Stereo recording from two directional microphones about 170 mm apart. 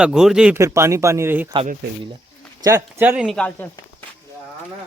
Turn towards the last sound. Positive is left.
turn(degrees=10)  # may be behind; listen again after turning